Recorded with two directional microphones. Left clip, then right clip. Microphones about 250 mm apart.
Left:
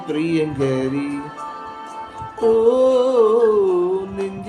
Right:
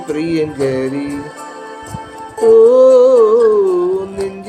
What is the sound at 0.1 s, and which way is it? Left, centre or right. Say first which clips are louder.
Music: right 3 dB; centre.